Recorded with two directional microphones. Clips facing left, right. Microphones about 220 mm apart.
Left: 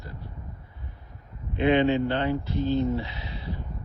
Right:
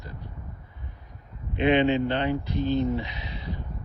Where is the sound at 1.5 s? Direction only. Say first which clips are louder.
Even; 20° right (ahead or behind).